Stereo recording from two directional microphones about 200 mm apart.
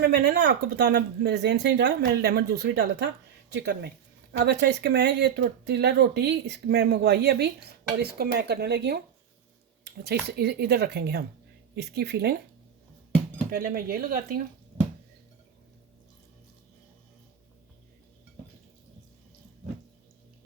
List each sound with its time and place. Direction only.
0.0 s speech: 55° right (ahead or behind)
9.8 s a sound: 55° right (ahead or behind)
10.2 s speech: 55° right (ahead or behind)
13.5 s speech: 45° right (ahead or behind)